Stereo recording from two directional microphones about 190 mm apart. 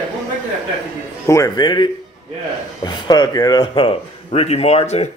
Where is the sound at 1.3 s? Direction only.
20° left (ahead or behind); by 5.1 s 35° left (ahead or behind).